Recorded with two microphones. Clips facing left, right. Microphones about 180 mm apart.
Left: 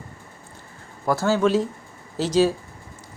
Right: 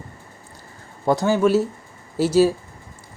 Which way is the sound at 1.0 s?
15° right (ahead or behind).